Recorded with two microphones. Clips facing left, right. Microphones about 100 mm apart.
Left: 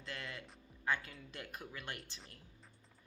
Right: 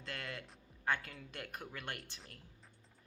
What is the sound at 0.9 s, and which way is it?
A woman's voice, 55° right (ahead or behind).